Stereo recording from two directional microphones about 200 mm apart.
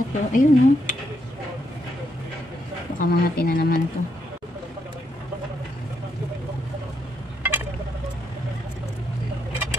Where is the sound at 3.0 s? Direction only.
45° left (ahead or behind).